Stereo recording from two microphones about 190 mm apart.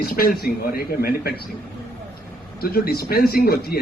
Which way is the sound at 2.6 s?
50° left (ahead or behind).